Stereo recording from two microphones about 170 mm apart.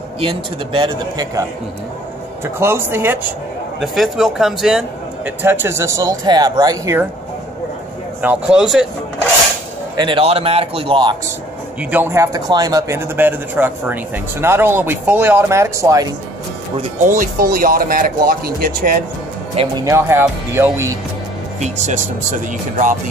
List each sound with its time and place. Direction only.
0.2 s a man's voice: 30° right (ahead or behind)
2.4 s a man's voice: 15° right (ahead or behind)
3.8 s a man's voice: centre (ahead or behind); by 7.1 s 20° right (ahead or behind)
8.2 s speech: 5° right (ahead or behind)
9.9 s speech: 30° right (ahead or behind)
11.9 s a man's voice: 15° right (ahead or behind)
17.0 s speech: 50° right (ahead or behind)
19.8 s a man's voice: 15° right (ahead or behind)
21.5 s speech: 45° right (ahead or behind)